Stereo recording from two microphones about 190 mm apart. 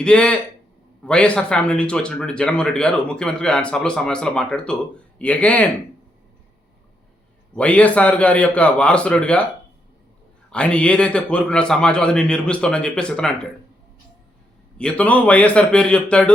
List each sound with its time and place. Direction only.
0.0 s a man's voice: 5° left (ahead or behind)
7.5 s a man's voice: 5° left (ahead or behind)
10.5 s speech: 5° left (ahead or behind)
14.8 s a man's voice: 5° left (ahead or behind)